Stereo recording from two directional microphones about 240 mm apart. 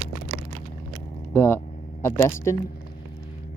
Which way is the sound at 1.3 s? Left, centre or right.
Centre.